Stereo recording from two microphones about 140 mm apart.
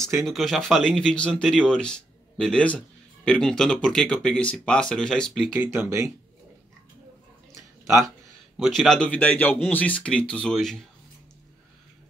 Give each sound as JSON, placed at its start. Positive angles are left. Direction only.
{"t": 0.2, "sound": "speech", "side_deg": 0}
{"t": 5.6, "sound": "speech", "side_deg": -15}
{"t": 8.5, "sound": "speech", "side_deg": 0}